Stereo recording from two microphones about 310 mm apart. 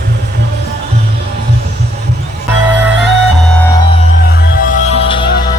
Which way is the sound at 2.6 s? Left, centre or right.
Centre.